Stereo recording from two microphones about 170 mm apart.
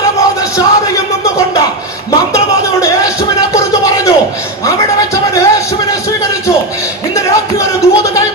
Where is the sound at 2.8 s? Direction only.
20° left (ahead or behind).